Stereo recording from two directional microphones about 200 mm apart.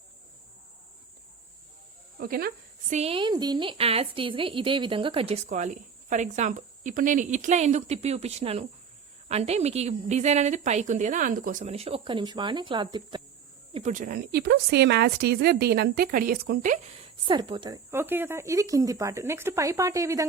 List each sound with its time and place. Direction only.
2.1 s speech: 50° right (ahead or behind)
2.9 s a woman's voice: 30° right (ahead or behind)
13.7 s a woman's voice: 40° right (ahead or behind)
17.2 s speech: 25° right (ahead or behind)
17.9 s speech: 10° right (ahead or behind)